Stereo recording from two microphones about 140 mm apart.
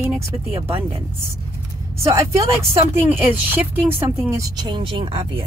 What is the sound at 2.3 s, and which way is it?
Speech, 45° right (ahead or behind).